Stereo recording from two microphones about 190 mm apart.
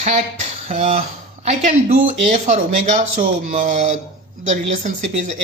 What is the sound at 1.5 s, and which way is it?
Speech, 45° right (ahead or behind).